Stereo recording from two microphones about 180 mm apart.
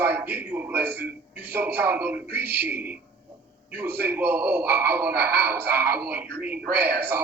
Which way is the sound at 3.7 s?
60° right (ahead or behind).